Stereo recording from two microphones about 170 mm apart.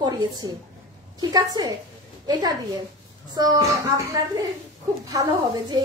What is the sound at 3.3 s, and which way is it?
Speech, 20° right (ahead or behind).